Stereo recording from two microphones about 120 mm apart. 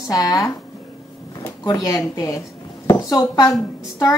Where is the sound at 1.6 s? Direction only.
30° left (ahead or behind).